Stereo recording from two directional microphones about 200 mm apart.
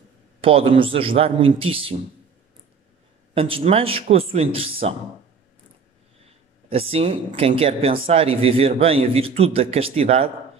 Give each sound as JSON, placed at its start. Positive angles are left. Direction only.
{"t": 0.4, "sound": "a man's voice", "side_deg": -25}
{"t": 3.3, "sound": "a man's voice", "side_deg": -30}
{"t": 6.7, "sound": "a man's voice", "side_deg": -30}